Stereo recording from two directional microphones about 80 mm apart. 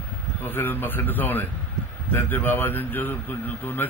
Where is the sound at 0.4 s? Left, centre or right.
Left.